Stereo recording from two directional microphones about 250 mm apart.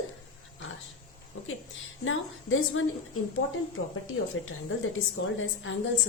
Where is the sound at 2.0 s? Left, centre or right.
Left.